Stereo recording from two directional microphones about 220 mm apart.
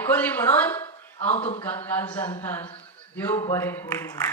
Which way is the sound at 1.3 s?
30° left (ahead or behind).